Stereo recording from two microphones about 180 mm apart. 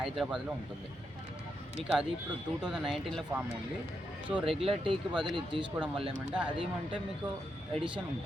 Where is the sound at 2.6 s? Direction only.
5° right (ahead or behind).